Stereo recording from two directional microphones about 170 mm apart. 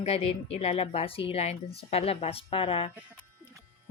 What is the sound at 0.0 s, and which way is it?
A woman's voice, 35° left (ahead or behind).